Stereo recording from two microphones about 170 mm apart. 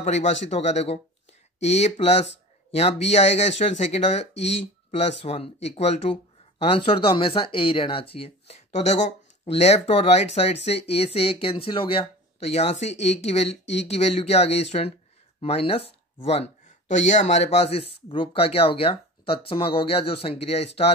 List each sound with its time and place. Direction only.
0.0 s speech: 45° left (ahead or behind)